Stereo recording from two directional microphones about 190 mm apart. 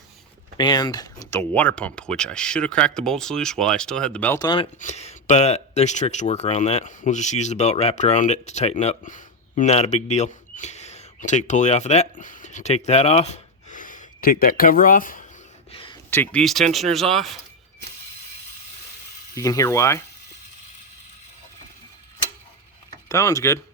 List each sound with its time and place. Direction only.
0.5 s speech: 20° left (ahead or behind)
4.4 s speech: 25° left (ahead or behind)
4.8 s speech: 35° left (ahead or behind)
15.7 s a sound: 30° left (ahead or behind)
16.0 s speech: 10° left (ahead or behind)
19.3 s speech: 15° left (ahead or behind)
23.0 s speech: 15° left (ahead or behind)